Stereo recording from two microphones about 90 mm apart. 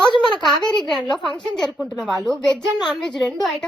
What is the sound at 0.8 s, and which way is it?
A woman's voice, 5° left (ahead or behind).